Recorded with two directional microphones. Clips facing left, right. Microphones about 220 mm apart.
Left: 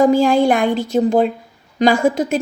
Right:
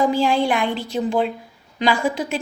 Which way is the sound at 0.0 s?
45° left (ahead or behind).